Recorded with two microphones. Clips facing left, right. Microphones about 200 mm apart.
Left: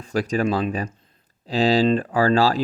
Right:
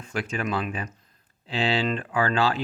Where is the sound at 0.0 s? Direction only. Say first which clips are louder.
Left 8 dB; 35° left (ahead or behind).